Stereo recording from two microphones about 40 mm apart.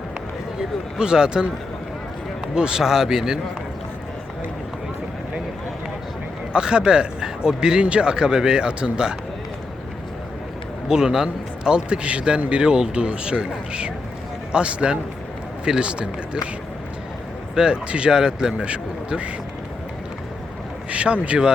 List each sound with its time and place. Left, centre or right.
0.9 s speech: centre
2.6 s a man's voice: centre
6.5 s speech: right
10.8 s speech: centre
17.5 s speech: right
20.9 s speech: right